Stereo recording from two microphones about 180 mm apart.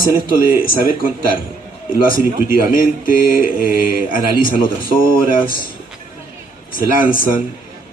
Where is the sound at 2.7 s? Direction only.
50° left (ahead or behind).